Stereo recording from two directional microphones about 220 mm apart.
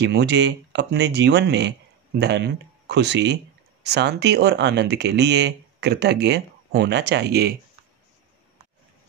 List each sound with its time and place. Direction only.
0.0 s speech: 50° right (ahead or behind)